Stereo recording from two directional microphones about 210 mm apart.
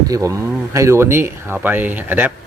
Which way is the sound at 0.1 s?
15° right (ahead or behind).